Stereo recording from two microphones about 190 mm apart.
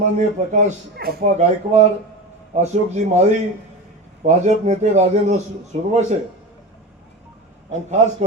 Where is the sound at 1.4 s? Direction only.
35° right (ahead or behind).